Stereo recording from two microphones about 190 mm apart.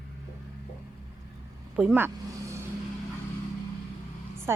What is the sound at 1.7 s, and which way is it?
Speech, 5° right (ahead or behind).